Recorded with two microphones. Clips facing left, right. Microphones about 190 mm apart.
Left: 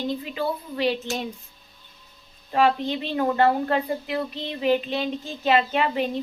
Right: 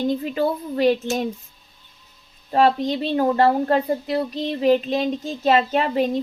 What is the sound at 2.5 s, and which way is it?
Speech, 35° right (ahead or behind).